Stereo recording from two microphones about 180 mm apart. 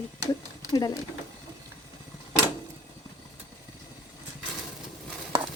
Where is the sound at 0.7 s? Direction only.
20° left (ahead or behind).